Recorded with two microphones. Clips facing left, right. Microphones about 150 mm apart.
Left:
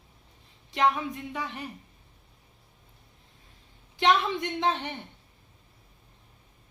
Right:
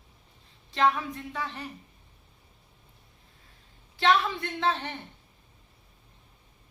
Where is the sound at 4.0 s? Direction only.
20° left (ahead or behind).